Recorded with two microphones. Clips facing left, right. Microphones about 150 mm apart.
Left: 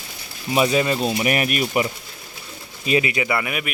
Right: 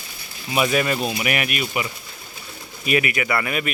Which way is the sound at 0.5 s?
25° left (ahead or behind).